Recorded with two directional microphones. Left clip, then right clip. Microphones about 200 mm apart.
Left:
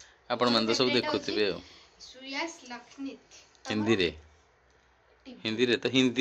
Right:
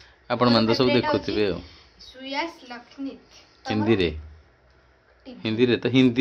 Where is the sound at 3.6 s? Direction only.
Centre (ahead or behind).